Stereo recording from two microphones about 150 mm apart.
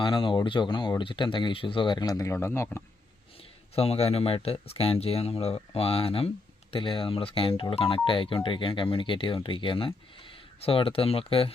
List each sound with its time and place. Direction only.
0.0 s speech: 35° left (ahead or behind); by 2.8 s 15° left (ahead or behind)
3.8 s speech: 40° left (ahead or behind)